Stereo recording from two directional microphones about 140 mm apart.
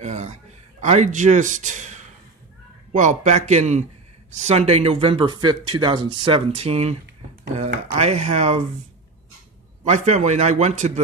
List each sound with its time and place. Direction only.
0.0 s a sound: 55° right (ahead or behind)
0.8 s a man's voice: 60° right (ahead or behind)
9.8 s a man's voice: 55° right (ahead or behind)